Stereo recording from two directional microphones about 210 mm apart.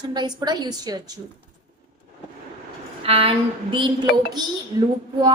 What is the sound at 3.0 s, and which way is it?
Speech, 25° right (ahead or behind).